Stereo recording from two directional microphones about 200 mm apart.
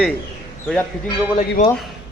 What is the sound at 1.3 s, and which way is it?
Speech, 35° left (ahead or behind).